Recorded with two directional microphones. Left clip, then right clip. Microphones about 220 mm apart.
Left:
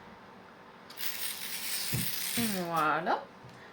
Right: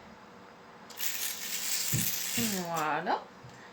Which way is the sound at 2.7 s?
30° left (ahead or behind).